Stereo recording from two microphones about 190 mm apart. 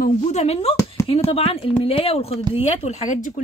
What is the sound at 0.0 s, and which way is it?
A woman's voice, 35° left (ahead or behind).